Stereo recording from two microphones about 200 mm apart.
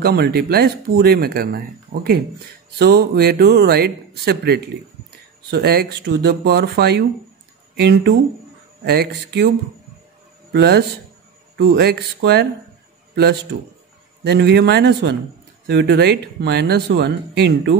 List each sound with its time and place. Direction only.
0.0 s speech: 50° right (ahead or behind)
10.5 s a man's voice: 55° right (ahead or behind)